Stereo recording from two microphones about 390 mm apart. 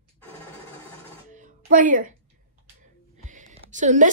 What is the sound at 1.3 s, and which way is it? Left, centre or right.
Music, centre.